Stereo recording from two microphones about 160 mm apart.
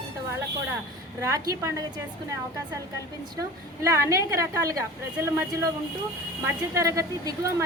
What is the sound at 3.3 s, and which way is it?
A woman's voice, 20° right (ahead or behind).